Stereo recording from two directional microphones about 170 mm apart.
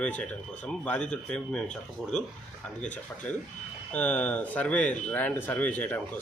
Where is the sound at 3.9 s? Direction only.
10° left (ahead or behind).